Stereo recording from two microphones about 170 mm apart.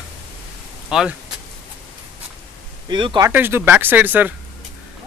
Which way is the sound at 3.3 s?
15° right (ahead or behind).